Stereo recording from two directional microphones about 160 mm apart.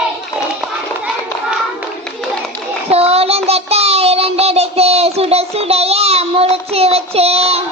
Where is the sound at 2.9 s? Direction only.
40° right (ahead or behind).